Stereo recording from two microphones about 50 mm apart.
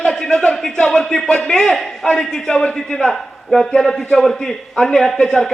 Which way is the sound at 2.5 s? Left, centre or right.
Left.